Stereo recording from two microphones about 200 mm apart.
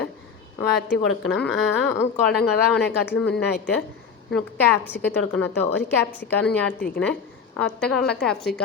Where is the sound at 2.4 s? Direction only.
55° left (ahead or behind).